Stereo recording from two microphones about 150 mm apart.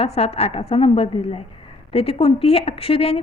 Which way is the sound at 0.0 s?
40° left (ahead or behind).